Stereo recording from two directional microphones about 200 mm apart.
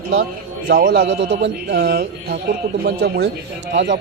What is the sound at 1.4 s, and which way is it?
A man's voice, 60° right (ahead or behind).